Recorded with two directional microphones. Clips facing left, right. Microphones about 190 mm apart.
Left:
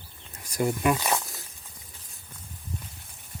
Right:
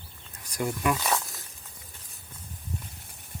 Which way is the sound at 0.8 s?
5° left (ahead or behind).